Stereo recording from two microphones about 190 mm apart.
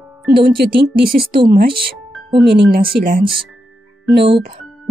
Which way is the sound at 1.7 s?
25° right (ahead or behind).